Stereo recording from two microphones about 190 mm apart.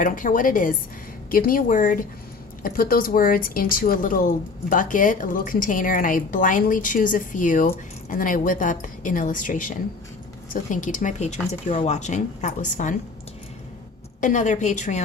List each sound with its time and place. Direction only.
0.0 s speech: 45° left (ahead or behind)
14.2 s speech: 40° left (ahead or behind)